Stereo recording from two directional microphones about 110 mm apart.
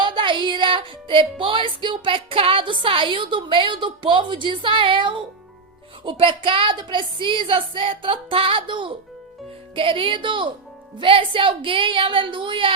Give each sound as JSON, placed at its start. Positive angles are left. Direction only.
{"t": 0.0, "sound": "music", "side_deg": -50}
{"t": 6.1, "sound": "speech", "side_deg": -50}